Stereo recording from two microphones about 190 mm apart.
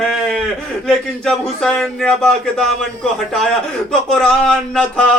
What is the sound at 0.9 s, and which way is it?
Speech, 5° left (ahead or behind).